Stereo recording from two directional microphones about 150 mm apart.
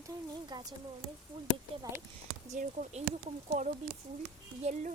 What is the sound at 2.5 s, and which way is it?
Speech, 55° right (ahead or behind).